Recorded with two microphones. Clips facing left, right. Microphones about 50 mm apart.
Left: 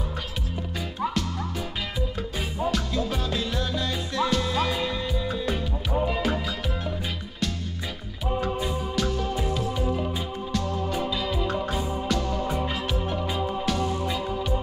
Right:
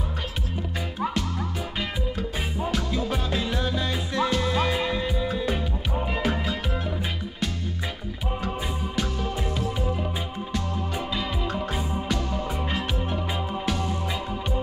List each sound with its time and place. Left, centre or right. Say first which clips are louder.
1.0 s music: even; centre
8.9 s music: left 1 dB; centre
10.5 s organ: left 3 dB; centre
11.7 s music: left 1 dB; centre